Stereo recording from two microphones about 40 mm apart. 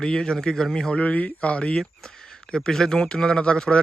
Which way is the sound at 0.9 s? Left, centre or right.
Left.